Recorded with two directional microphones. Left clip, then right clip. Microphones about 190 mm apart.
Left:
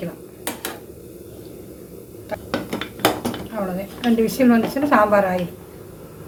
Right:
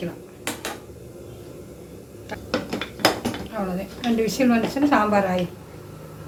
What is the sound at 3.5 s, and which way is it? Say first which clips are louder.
A woman's voice: left 2 dB; 10° left (ahead or behind).